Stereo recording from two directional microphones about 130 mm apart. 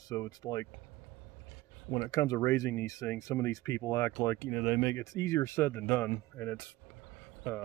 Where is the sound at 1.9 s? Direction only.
25° left (ahead or behind).